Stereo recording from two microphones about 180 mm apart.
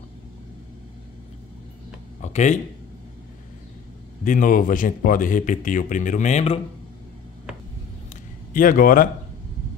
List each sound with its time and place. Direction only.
2.2 s speech: 40° left (ahead or behind)
4.2 s speech: 45° left (ahead or behind)
8.5 s speech: 50° left (ahead or behind)